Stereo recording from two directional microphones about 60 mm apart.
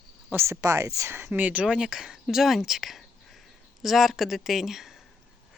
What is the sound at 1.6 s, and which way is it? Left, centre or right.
Speech, centre.